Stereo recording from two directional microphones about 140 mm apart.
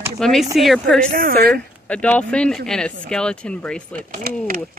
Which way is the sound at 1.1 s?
90° right.